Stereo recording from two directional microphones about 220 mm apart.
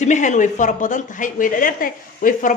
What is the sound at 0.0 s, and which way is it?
A woman's voice, 35° left (ahead or behind).